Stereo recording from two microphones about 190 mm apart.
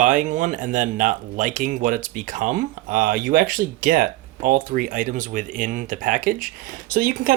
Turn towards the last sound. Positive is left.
turn(degrees=-50)  # may be behind; listen again after turning